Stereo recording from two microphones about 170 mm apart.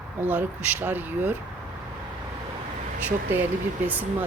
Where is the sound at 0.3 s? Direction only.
10° right (ahead or behind).